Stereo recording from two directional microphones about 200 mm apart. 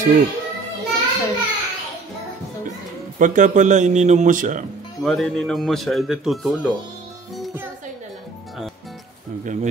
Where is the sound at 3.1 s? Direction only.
40° right (ahead or behind).